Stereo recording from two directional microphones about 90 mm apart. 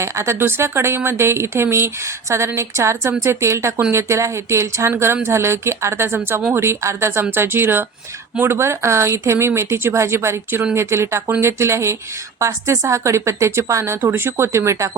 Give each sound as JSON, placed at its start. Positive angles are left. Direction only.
{"t": 0.0, "sound": "speech", "side_deg": -30}